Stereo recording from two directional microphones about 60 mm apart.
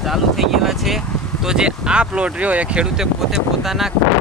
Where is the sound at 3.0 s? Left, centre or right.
Centre.